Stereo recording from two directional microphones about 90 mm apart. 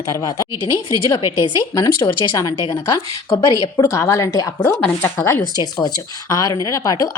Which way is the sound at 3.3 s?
35° left (ahead or behind).